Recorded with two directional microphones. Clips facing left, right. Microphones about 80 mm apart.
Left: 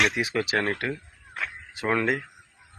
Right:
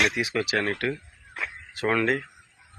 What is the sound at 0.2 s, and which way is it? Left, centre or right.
Speech, left.